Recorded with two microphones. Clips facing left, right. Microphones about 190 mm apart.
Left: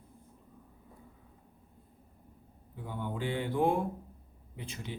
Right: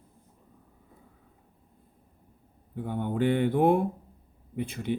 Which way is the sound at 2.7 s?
60° right (ahead or behind).